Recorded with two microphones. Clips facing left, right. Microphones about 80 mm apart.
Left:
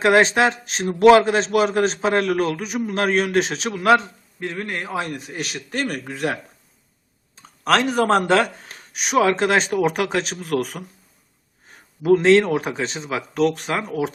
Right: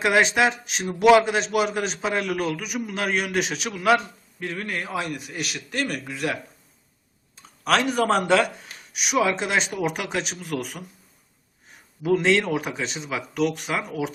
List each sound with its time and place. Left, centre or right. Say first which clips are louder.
0.0 s a man's voice: left 4 dB; left
7.3 s a sound: left 3 dB; left
7.9 s a man's voice: left 3 dB; left
12.0 s a man's voice: left 6 dB; left